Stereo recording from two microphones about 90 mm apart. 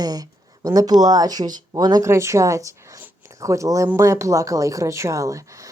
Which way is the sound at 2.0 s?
30° right (ahead or behind).